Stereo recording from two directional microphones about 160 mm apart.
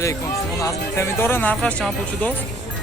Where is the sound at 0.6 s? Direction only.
15° left (ahead or behind).